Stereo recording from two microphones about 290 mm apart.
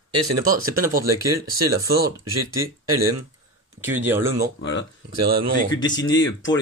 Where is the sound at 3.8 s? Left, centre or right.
Centre.